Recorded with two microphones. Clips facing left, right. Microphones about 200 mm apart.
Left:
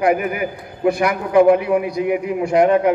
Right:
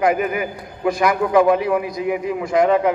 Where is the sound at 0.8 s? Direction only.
60° left (ahead or behind).